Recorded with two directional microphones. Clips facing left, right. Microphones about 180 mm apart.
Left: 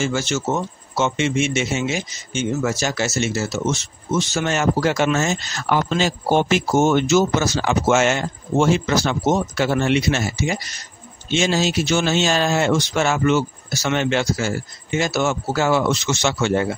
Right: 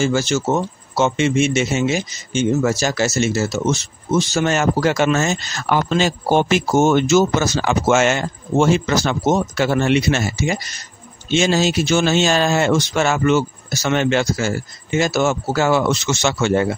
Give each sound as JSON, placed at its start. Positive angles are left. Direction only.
{"t": 0.0, "sound": "speech", "side_deg": -35}